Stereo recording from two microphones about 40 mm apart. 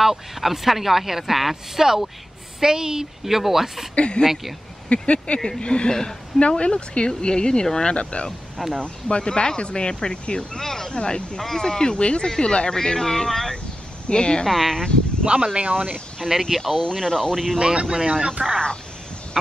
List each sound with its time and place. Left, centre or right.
0.0 s a woman's voice: centre
3.9 s speech: left
6.4 s speech: left
10.6 s speech: centre
10.9 s speech: left
14.0 s speech: left
14.5 s speech: centre
15.2 s speech: right
15.7 s speech: right
16.4 s speech: centre
16.7 s speech: centre
17.6 s speech: right
18.4 s speech: right